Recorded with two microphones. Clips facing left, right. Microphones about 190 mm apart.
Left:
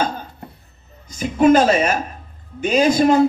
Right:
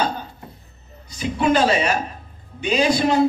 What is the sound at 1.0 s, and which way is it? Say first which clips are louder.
A woman's voice: left 6 dB; 45° left (ahead or behind).